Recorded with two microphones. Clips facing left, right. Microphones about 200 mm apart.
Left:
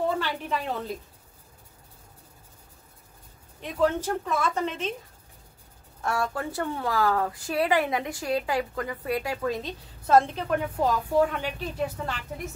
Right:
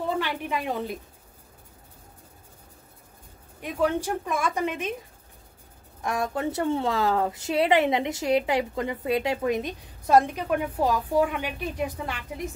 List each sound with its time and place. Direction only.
0.2 s a woman's voice: 15° right (ahead or behind)
3.6 s speech: 10° right (ahead or behind)
5.9 s speech: 15° right (ahead or behind)